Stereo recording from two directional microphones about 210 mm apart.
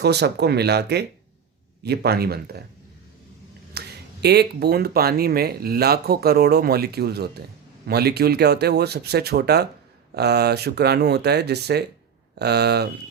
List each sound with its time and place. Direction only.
0.0 s speech: 50° right (ahead or behind)
3.8 s speech: 50° right (ahead or behind)